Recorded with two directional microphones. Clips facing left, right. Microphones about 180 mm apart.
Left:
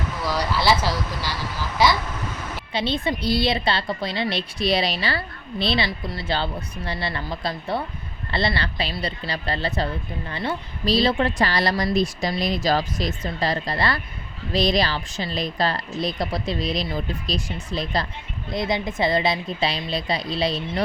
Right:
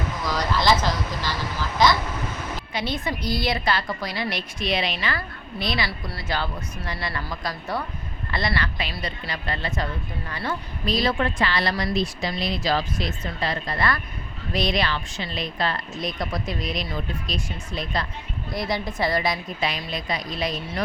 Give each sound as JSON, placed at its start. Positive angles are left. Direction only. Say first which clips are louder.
{"t": 0.3, "sound": "speech", "louder": "left 1 dB", "side_deg": 10}
{"t": 2.7, "sound": "a woman's voice", "louder": "left 4 dB", "side_deg": 30}
{"t": 18.5, "sound": "a woman's voice", "louder": "left 3 dB", "side_deg": 20}